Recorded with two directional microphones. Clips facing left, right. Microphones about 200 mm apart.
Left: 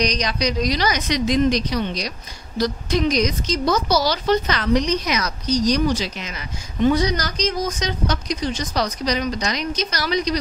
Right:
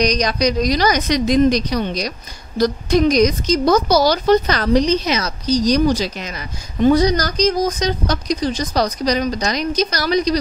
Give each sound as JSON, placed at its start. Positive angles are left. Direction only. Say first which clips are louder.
{"t": 0.0, "sound": "a woman's voice", "louder": "right 5 dB", "side_deg": -45}